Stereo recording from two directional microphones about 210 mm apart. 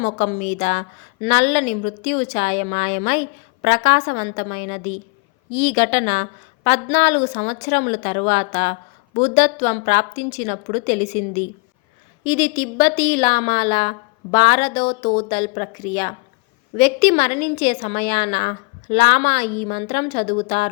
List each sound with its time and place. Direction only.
0.6 s a woman's voice: 30° left (ahead or behind)
5.5 s a woman's voice: 65° left (ahead or behind)
5.7 s a woman's voice: 30° left (ahead or behind)
12.2 s a woman's voice: 20° left (ahead or behind)